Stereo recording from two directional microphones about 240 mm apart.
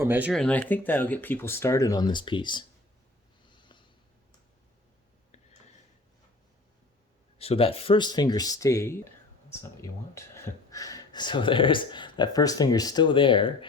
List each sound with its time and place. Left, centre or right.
0.0 s speech: centre
3.5 s a sound: centre
7.3 s speech: left